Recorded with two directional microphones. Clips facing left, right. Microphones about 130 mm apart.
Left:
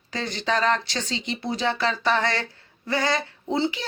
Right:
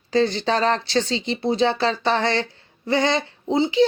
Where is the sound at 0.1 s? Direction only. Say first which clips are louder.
Right 7 dB; 30° right (ahead or behind).